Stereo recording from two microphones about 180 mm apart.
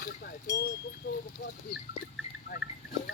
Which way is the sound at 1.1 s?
55° left (ahead or behind).